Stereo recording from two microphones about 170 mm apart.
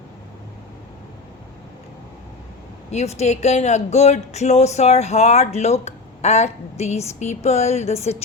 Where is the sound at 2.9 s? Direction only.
40° left (ahead or behind).